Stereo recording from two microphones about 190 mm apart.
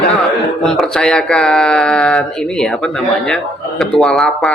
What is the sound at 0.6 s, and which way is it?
Speech, centre (ahead or behind).